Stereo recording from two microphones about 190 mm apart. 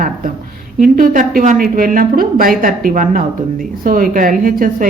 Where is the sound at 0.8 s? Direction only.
45° right (ahead or behind).